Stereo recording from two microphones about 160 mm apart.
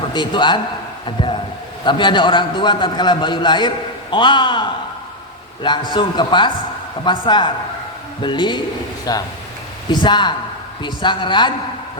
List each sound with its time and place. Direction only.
0.1 s a man's voice: 30° left (ahead or behind)
1.8 s a man's voice: 30° left (ahead or behind)